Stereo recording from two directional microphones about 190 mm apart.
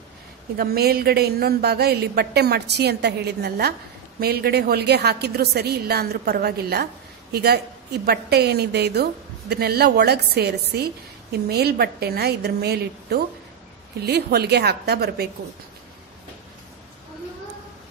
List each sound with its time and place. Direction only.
0.6 s a woman's voice: 55° right (ahead or behind)